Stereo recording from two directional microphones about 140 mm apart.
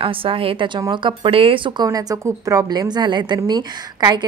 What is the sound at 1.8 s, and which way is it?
A woman's voice, 25° right (ahead or behind).